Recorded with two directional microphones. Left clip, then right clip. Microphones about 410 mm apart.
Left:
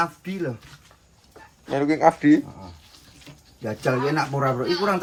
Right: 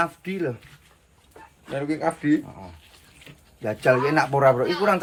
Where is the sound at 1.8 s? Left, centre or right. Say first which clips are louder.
Left 7 dB; centre.